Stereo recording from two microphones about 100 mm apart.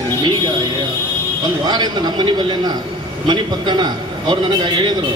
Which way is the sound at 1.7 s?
45° right (ahead or behind).